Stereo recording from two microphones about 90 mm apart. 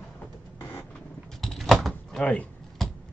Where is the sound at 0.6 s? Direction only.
15° left (ahead or behind).